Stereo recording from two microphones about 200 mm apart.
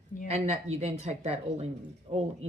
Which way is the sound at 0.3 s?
30° right (ahead or behind).